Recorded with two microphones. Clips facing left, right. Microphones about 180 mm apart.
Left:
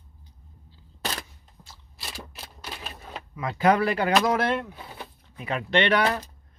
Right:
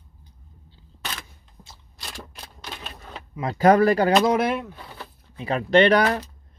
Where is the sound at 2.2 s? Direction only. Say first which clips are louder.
Right 1 dB; 5° left (ahead or behind).